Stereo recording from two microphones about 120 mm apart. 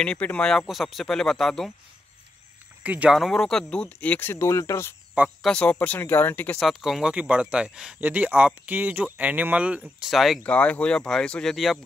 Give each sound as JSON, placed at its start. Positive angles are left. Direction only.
{"t": 0.0, "sound": "speech", "side_deg": 10}
{"t": 2.8, "sound": "speech", "side_deg": -10}
{"t": 5.4, "sound": "speech", "side_deg": 5}
{"t": 6.6, "sound": "speech", "side_deg": 0}